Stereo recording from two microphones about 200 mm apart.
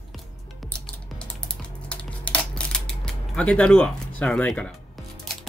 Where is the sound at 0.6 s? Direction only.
5° left (ahead or behind).